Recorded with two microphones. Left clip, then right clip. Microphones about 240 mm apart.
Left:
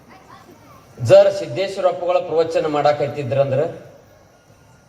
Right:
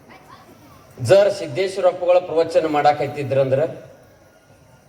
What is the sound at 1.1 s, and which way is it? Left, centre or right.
A man's voice, right.